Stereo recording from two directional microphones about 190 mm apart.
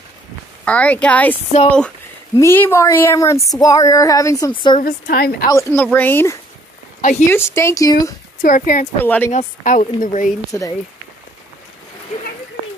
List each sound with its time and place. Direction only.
0.7 s speech: 5° left (ahead or behind)
2.3 s speech: 15° left (ahead or behind)
4.8 s a woman's voice: 50° left (ahead or behind)
5.5 s speech: 15° left (ahead or behind)
7.0 s speech: 40° left (ahead or behind)
7.2 s speech: 15° left (ahead or behind)
8.4 s a woman's voice: 40° left (ahead or behind)
9.0 s speech: 10° left (ahead or behind)
9.3 s a woman's voice: 40° left (ahead or behind)
10.5 s speech: 15° left (ahead or behind)